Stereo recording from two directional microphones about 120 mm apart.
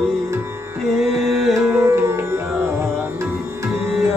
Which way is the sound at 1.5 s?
25° right (ahead or behind).